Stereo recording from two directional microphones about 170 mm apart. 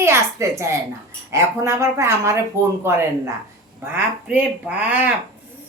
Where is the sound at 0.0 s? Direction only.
15° right (ahead or behind).